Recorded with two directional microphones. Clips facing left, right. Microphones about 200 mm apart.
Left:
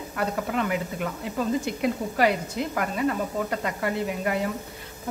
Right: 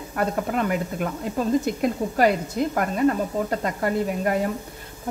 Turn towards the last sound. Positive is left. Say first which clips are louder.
# right 4 dB
turn(degrees=-40)  # may be behind; listen again after turning